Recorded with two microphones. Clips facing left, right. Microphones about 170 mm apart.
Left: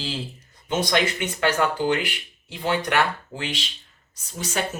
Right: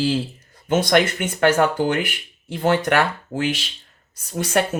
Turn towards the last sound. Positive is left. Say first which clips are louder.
# right 8 dB
turn(degrees=-60)  # may be behind; listen again after turning